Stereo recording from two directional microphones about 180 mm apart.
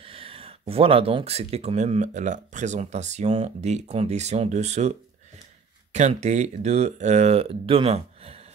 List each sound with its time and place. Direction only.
0.0 s speech: 30° right (ahead or behind)